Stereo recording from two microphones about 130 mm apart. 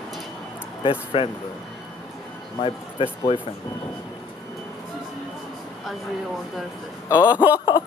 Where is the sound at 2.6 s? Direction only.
45° left (ahead or behind).